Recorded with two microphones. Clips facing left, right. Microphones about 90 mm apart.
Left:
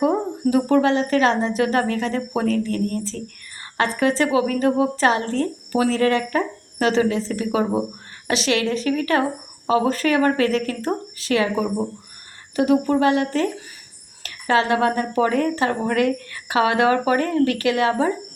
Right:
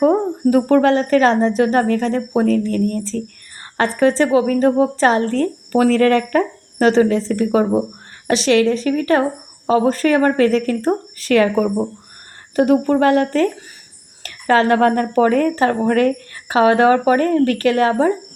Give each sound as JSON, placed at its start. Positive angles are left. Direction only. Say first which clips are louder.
{"t": 0.0, "sound": "a woman's voice", "louder": "right 5 dB", "side_deg": -45}
{"t": 5.4, "sound": "speech", "louder": "right 5 dB", "side_deg": -50}
{"t": 8.3, "sound": "a woman's voice", "louder": "right 6 dB", "side_deg": -35}
{"t": 11.3, "sound": "a woman's voice", "louder": "right 6 dB", "side_deg": -50}